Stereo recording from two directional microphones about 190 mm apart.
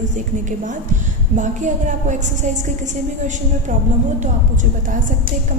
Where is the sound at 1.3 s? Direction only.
40° right (ahead or behind).